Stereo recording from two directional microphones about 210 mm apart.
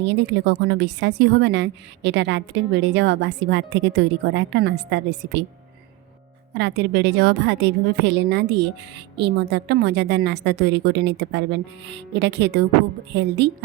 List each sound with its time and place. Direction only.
0.0 s a woman's voice: 55° right (ahead or behind)
6.5 s a woman's voice: 55° right (ahead or behind)